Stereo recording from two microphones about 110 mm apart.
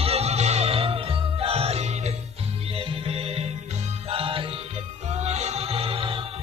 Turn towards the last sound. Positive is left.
turn(degrees=-60)  # may be behind; listen again after turning